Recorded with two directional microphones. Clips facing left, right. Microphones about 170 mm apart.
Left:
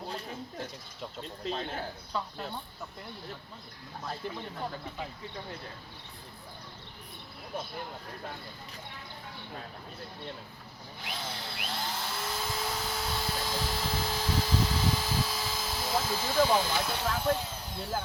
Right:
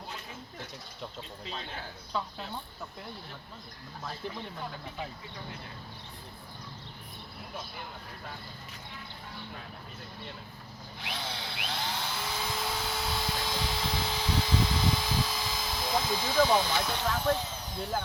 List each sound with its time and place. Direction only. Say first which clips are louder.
1.5 s speech: left 8 dB; 45° left (ahead or behind)
11.0 s drill: right 1 dB; centre (ahead or behind)